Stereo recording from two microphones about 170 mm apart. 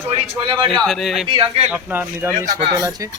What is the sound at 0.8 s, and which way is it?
Speech, centre (ahead or behind).